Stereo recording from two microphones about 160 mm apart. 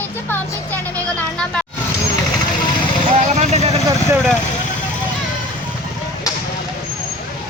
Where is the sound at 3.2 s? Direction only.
45° right (ahead or behind).